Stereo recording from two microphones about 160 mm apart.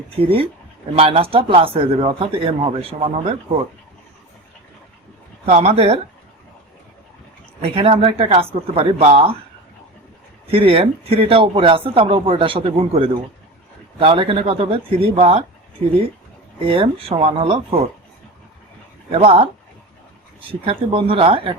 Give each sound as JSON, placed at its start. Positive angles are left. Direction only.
{"t": 0.2, "sound": "speech", "side_deg": -35}
{"t": 5.5, "sound": "speech", "side_deg": -40}
{"t": 7.6, "sound": "speech", "side_deg": -35}
{"t": 10.4, "sound": "speech", "side_deg": -35}
{"t": 16.6, "sound": "speech", "side_deg": -35}
{"t": 19.1, "sound": "speech", "side_deg": -35}
{"t": 20.5, "sound": "speech", "side_deg": -35}